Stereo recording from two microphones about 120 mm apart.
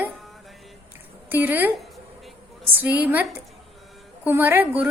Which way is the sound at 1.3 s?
15° right (ahead or behind).